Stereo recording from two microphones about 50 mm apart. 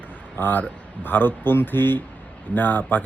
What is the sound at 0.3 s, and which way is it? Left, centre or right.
Speech, left.